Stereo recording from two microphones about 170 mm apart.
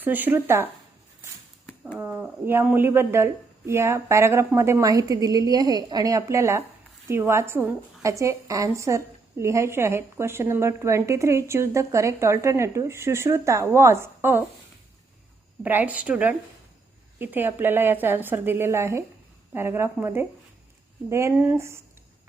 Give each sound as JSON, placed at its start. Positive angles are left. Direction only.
{"t": 0.0, "sound": "speech", "side_deg": -10}
{"t": 2.0, "sound": "speech", "side_deg": -10}
{"t": 15.6, "sound": "speech", "side_deg": -10}